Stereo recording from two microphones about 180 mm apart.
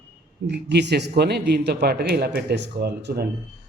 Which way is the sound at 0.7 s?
70° right (ahead or behind).